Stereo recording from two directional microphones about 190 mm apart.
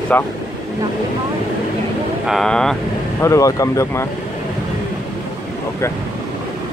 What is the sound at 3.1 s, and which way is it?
Speech, 15° left (ahead or behind).